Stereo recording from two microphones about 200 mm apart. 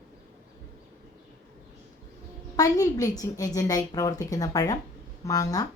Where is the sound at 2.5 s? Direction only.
15° left (ahead or behind).